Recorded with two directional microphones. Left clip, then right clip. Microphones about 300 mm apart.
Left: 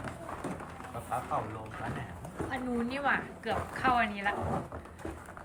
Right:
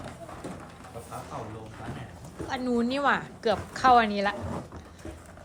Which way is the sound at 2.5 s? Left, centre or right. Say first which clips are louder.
Right 8 dB; centre.